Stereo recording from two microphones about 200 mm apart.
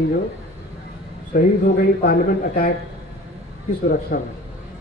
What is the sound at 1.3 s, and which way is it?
Speech, 45° left (ahead or behind).